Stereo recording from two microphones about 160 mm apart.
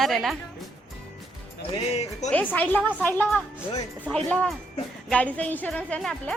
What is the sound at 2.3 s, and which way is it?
A woman's voice, 10° left (ahead or behind).